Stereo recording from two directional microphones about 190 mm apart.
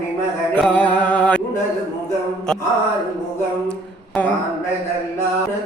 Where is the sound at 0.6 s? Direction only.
5° left (ahead or behind).